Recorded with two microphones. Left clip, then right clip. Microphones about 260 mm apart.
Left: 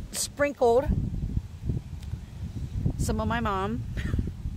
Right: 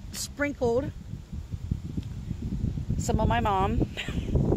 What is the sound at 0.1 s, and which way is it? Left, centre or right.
Speech, left.